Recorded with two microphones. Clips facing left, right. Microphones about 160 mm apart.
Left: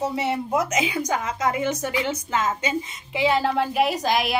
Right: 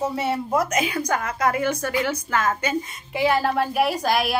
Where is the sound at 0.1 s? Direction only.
20° left (ahead or behind).